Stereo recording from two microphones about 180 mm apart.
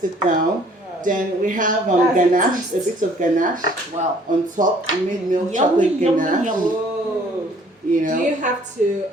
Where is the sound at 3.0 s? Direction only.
50° right (ahead or behind).